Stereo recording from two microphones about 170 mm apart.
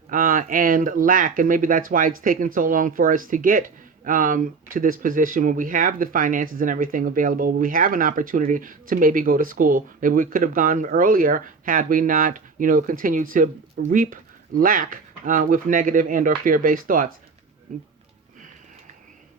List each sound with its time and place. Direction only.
0.1 s speech: 55° right (ahead or behind)